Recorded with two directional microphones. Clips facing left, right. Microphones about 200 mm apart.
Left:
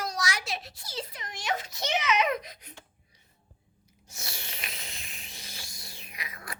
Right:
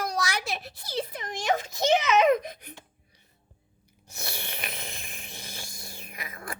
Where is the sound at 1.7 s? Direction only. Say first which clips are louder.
Right 6 dB; 50° right (ahead or behind).